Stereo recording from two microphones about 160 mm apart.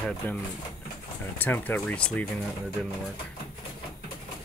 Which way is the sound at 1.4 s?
10° left (ahead or behind).